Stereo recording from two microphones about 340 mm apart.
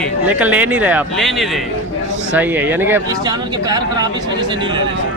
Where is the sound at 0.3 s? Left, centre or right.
Centre.